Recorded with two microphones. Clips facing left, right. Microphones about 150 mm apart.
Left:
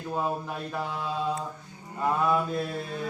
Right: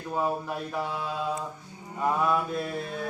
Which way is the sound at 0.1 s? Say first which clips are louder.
Right 2 dB; centre (ahead or behind).